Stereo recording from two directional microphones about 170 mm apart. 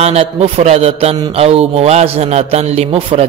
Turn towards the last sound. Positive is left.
turn(degrees=-35)  # may be behind; listen again after turning